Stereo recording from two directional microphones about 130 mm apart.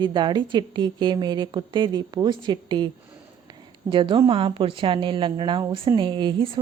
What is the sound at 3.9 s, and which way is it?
A woman's voice, 40° right (ahead or behind).